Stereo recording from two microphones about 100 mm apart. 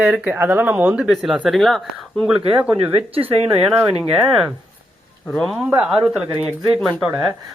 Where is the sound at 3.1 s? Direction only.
70° right (ahead or behind).